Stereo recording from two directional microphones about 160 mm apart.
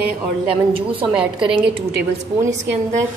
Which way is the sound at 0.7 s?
35° right (ahead or behind).